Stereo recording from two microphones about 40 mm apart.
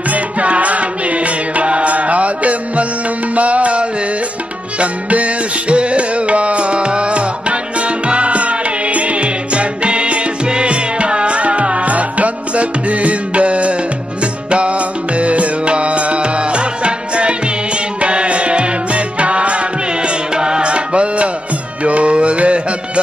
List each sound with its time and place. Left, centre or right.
0.1 s music: right